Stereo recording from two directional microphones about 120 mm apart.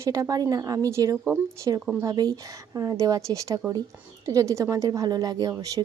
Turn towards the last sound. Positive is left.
turn(degrees=-30)  # may be behind; listen again after turning